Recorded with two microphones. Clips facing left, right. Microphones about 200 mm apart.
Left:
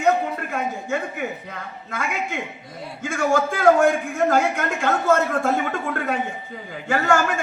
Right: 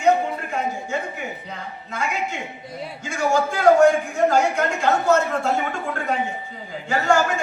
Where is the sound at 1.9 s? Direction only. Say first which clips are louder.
Right 1 dB; 55° left (ahead or behind).